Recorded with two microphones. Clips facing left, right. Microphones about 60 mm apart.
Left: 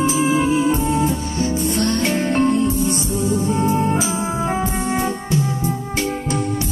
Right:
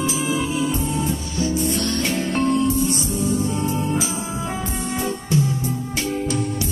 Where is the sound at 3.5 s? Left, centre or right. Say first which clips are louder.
Left 5 dB; left.